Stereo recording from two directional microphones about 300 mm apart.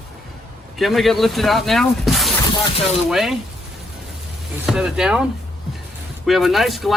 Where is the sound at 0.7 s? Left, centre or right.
Centre.